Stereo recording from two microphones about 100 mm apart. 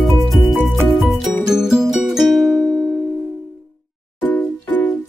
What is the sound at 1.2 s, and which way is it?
Music, 5° right (ahead or behind).